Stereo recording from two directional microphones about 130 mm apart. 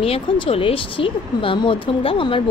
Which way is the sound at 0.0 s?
45° left (ahead or behind).